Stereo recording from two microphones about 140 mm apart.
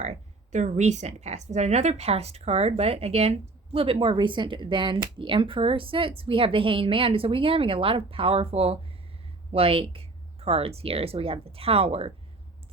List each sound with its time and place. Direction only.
0.0 s a woman's voice: 55° right (ahead or behind)